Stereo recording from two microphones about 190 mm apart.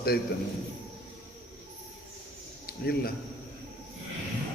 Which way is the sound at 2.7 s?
55° left (ahead or behind).